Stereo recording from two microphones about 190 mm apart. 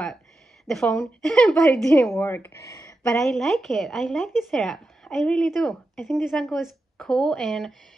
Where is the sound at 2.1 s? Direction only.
10° left (ahead or behind).